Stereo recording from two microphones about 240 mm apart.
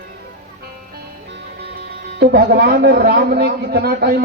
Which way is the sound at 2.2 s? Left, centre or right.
Right.